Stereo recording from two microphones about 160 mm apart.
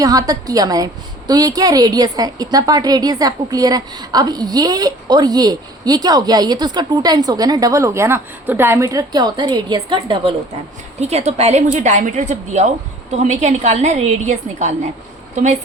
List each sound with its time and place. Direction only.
0.0 s a woman's voice: 20° right (ahead or behind)
11.0 s a woman's voice: 40° right (ahead or behind)